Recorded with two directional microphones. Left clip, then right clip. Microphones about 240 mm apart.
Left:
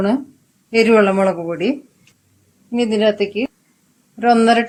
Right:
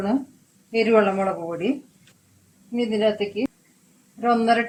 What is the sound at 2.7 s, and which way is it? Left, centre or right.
Speech, left.